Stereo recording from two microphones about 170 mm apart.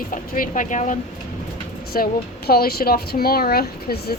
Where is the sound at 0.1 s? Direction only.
50° left (ahead or behind).